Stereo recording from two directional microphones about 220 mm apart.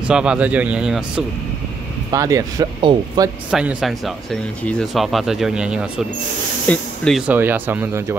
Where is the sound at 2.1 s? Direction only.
15° right (ahead or behind).